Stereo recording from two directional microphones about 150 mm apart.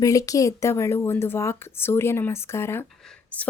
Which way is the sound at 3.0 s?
5° left (ahead or behind).